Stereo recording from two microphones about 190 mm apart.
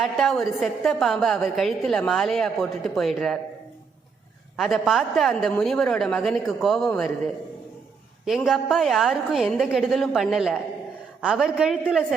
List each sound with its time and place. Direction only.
0.0 s a woman's voice: centre (ahead or behind)
4.5 s a woman's voice: centre (ahead or behind)
8.2 s a woman's voice: centre (ahead or behind)